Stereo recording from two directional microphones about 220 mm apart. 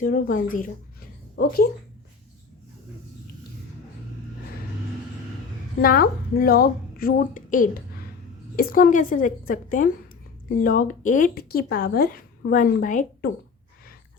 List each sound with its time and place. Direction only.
0.0 s speech: 40° left (ahead or behind)
5.8 s speech: 40° left (ahead or behind)